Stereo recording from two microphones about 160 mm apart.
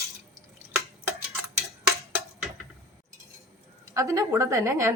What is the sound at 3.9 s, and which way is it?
Speech, 20° right (ahead or behind).